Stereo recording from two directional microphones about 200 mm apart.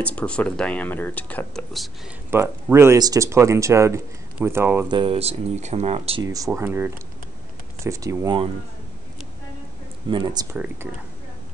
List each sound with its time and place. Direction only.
0.0 s speech: 5° left (ahead or behind)
2.3 s speech: 10° right (ahead or behind)
4.9 s speech: 30° right (ahead or behind)
6.2 s speech: 15° right (ahead or behind)
10.0 s speech: 20° right (ahead or behind)